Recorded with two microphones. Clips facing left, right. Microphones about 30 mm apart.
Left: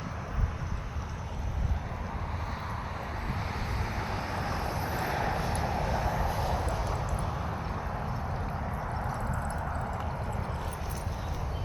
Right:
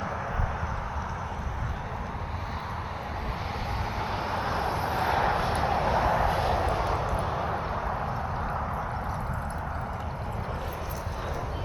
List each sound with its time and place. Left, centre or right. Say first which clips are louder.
4.0 s vehicle: right 6 dB; right